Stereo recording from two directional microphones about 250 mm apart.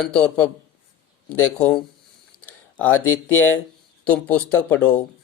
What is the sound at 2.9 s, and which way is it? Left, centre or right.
Speech, left.